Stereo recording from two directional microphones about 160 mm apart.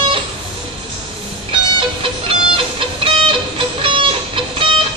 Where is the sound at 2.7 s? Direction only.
30° right (ahead or behind).